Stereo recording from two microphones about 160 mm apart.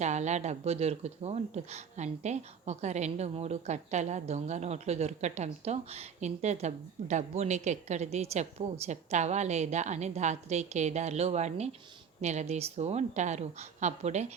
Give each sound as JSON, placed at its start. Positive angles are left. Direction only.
{"t": 0.0, "sound": "speech", "side_deg": -45}